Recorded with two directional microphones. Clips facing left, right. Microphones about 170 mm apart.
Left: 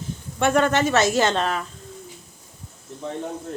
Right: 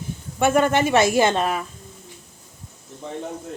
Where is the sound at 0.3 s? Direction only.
5° right (ahead or behind).